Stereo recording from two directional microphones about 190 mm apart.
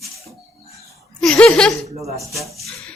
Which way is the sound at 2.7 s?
5° left (ahead or behind).